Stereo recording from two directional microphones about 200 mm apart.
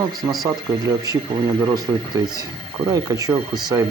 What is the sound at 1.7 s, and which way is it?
Speech, 20° right (ahead or behind).